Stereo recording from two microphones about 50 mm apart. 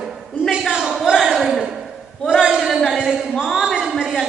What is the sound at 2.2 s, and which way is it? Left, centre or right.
Speech, centre.